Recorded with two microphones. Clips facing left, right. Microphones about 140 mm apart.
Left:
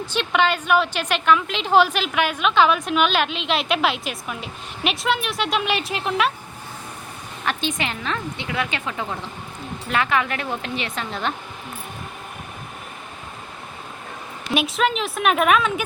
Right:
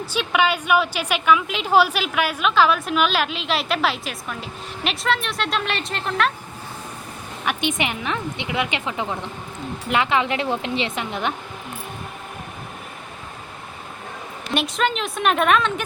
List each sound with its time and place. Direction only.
0.0 s a woman's voice: 5° right (ahead or behind)
7.4 s a woman's voice: 20° right (ahead or behind)
14.5 s a woman's voice: 5° left (ahead or behind)